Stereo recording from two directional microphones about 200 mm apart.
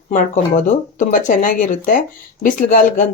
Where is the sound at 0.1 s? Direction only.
35° left (ahead or behind).